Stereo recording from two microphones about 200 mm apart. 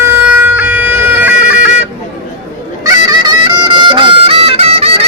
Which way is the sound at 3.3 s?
20° right (ahead or behind).